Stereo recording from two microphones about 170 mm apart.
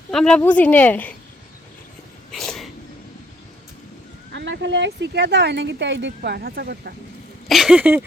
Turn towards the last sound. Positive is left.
turn(degrees=-10)  # may be behind; listen again after turning